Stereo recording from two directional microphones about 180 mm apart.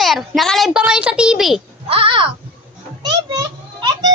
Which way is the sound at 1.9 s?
30° right (ahead or behind).